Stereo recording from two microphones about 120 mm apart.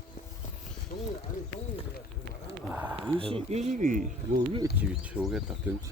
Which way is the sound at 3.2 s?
50° right (ahead or behind).